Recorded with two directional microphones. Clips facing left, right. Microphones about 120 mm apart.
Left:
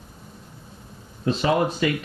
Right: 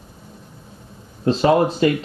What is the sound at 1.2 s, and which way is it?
Speech, 35° right (ahead or behind).